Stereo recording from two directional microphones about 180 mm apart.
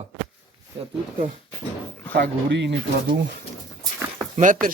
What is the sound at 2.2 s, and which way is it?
Speech, 75° right (ahead or behind).